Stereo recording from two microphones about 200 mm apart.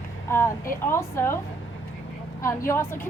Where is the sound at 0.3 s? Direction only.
15° left (ahead or behind).